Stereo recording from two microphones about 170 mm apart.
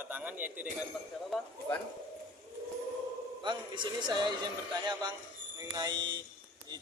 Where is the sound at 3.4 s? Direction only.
25° right (ahead or behind).